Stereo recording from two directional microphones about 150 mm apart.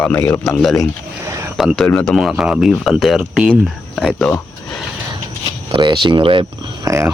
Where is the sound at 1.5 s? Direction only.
Centre (ahead or behind).